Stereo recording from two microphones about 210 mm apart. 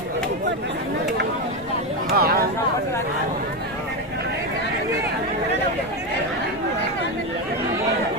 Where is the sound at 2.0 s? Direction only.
45° right (ahead or behind).